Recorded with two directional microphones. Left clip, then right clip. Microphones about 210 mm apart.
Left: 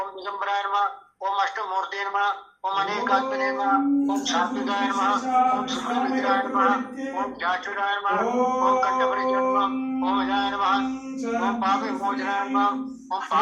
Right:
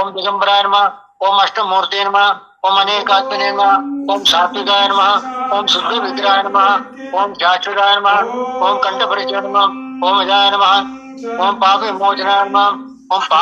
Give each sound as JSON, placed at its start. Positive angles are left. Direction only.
{"t": 0.0, "sound": "a man's voice", "side_deg": -40}